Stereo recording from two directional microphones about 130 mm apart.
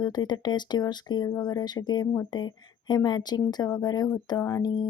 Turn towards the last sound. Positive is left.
turn(degrees=30)  # may be behind; listen again after turning